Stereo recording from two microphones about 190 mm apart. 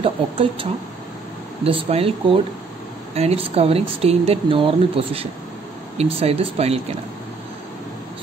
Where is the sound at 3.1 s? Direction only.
35° right (ahead or behind).